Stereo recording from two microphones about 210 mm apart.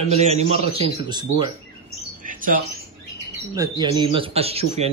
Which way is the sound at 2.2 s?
40° right (ahead or behind).